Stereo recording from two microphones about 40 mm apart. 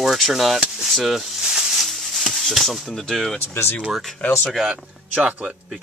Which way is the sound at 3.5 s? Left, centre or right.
Left.